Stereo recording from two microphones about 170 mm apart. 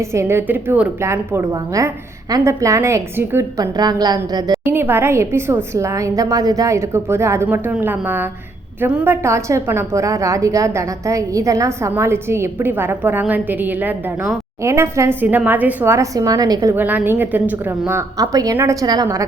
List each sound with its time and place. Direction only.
0.0 s a woman's voice: 15° right (ahead or behind)
4.7 s a woman's voice: 15° right (ahead or behind)
16.7 s a woman's voice: 10° right (ahead or behind)